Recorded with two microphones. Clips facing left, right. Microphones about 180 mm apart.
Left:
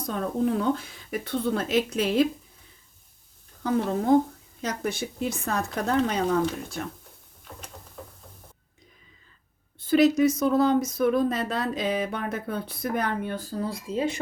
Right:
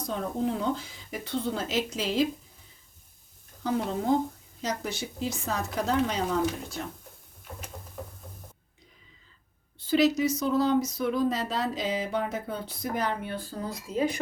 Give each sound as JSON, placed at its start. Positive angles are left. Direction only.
{"t": 0.1, "sound": "speech", "side_deg": 60}
{"t": 3.6, "sound": "speech", "side_deg": 55}
{"t": 9.8, "sound": "speech", "side_deg": 55}